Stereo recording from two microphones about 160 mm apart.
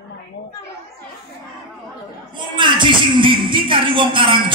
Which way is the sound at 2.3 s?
30° right (ahead or behind).